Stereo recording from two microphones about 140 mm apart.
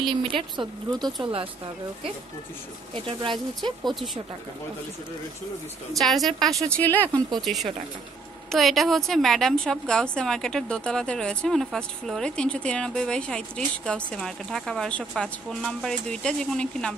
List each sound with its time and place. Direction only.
0.0 s speech: 35° right (ahead or behind)
2.9 s speech: 35° right (ahead or behind)
3.8 s a woman's voice: centre (ahead or behind)
5.9 s a woman's voice: centre (ahead or behind)
6.7 s speech: 10° left (ahead or behind)
7.4 s a woman's voice: centre (ahead or behind)